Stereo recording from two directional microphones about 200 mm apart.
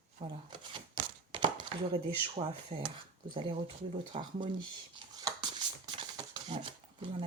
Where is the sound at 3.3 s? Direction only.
25° right (ahead or behind).